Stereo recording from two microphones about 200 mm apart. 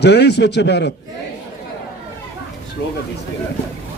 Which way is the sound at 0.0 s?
55° left (ahead or behind).